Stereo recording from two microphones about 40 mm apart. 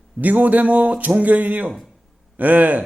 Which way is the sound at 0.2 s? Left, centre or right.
Right.